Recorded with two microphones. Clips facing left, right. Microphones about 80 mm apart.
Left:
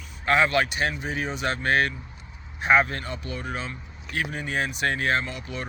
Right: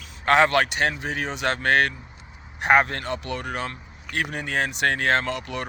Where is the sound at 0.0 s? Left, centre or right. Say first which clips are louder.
Right 4 dB; right.